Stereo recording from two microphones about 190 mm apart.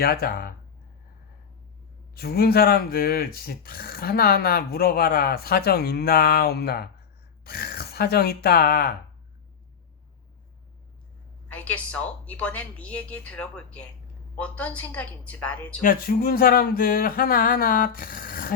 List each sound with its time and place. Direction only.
0.0 s speech: 55° left (ahead or behind)
2.1 s speech: 55° left (ahead or behind)
11.4 s a woman's voice: 5° left (ahead or behind)
15.8 s speech: 50° left (ahead or behind)